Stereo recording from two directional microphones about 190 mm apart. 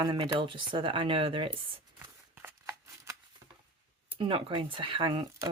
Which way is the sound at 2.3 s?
10° right (ahead or behind).